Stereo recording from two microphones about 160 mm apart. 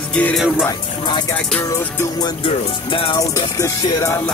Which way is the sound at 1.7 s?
15° left (ahead or behind).